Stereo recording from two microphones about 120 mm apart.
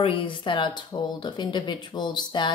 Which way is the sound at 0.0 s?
50° left (ahead or behind).